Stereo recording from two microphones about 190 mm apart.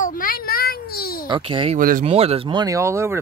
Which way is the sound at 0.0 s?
45° left (ahead or behind).